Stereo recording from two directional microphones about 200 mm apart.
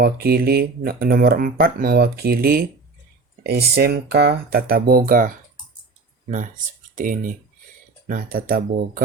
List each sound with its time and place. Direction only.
0.0 s speech: 50° right (ahead or behind)
6.9 s speech: 40° right (ahead or behind)